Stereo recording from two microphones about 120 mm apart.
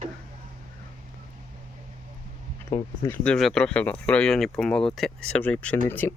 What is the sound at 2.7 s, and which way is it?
Speech, 25° left (ahead or behind).